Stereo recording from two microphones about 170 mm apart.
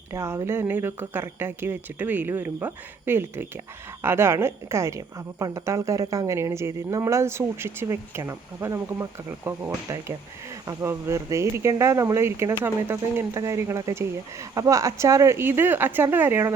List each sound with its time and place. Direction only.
0.1 s a woman's voice: 15° right (ahead or behind)